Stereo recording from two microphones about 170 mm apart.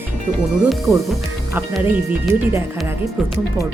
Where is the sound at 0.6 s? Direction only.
Centre (ahead or behind).